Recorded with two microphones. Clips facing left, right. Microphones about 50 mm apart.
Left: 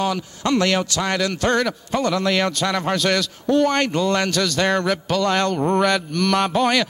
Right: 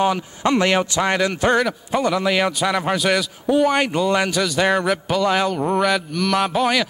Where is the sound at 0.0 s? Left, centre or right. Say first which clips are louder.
Right 3 dB; right.